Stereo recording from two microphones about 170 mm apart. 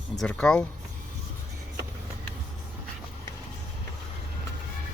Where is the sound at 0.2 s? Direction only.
5° left (ahead or behind).